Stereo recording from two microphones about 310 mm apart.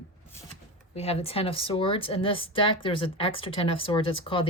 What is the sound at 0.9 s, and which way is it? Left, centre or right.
Speech, centre.